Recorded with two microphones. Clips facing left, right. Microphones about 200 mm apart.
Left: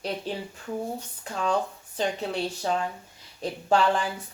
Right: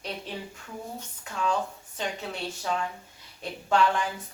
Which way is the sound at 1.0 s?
35° left (ahead or behind).